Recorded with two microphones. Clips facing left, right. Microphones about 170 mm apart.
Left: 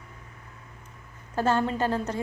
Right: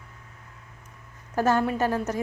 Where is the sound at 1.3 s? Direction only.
10° right (ahead or behind).